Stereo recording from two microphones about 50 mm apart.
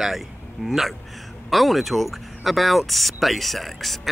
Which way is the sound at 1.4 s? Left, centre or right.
Centre.